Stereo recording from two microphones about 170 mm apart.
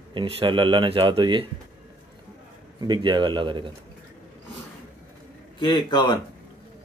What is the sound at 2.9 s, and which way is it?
Speech, 25° right (ahead or behind).